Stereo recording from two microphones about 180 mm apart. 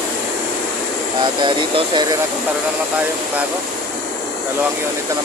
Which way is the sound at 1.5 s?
30° right (ahead or behind).